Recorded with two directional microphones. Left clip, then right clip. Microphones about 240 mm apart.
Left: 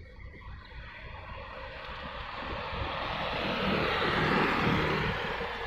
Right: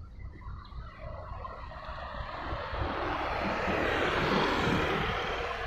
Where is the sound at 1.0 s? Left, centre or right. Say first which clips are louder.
Right 4 dB; left.